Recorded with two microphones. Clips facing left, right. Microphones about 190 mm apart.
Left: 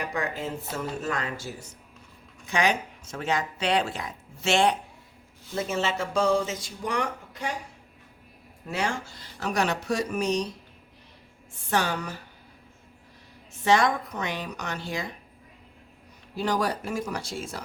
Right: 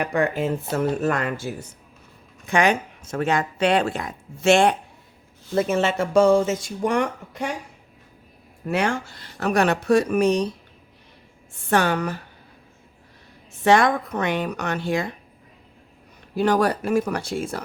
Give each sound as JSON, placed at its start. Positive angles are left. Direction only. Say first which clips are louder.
{"t": 0.0, "sound": "speech", "louder": "right 8 dB", "side_deg": -60}
{"t": 8.7, "sound": "speech", "louder": "right 6 dB", "side_deg": -60}
{"t": 11.7, "sound": "speech", "louder": "right 6 dB", "side_deg": -60}
{"t": 13.7, "sound": "speech", "louder": "right 5 dB", "side_deg": -55}
{"t": 16.3, "sound": "speech", "louder": "right 7 dB", "side_deg": -60}